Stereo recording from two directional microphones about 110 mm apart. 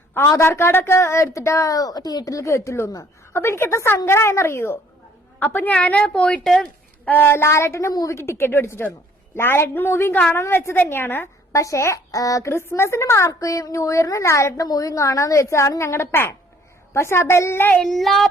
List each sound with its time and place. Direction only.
0.3 s a woman's voice: 25° left (ahead or behind); by 6.7 s 5° left (ahead or behind)
7.0 s a woman's voice: 15° left (ahead or behind)
17.7 s speech: centre (ahead or behind)